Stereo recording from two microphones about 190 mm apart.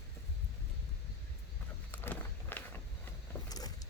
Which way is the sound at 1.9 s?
10° left (ahead or behind).